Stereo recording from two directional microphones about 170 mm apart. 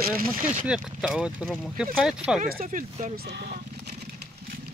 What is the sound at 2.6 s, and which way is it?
Speech, 45° right (ahead or behind).